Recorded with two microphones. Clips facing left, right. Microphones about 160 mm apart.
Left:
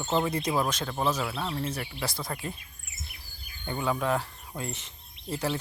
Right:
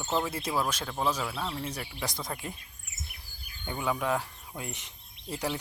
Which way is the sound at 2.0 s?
20° right (ahead or behind).